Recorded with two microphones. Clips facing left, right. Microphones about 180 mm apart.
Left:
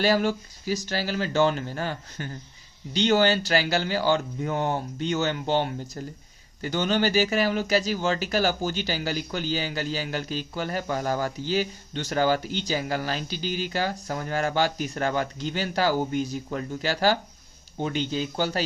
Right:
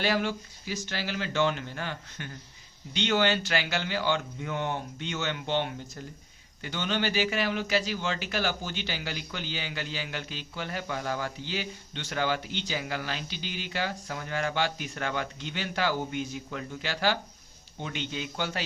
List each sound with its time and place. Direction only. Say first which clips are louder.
0.0 s a man's voice: left 5 dB; 40° left (ahead or behind)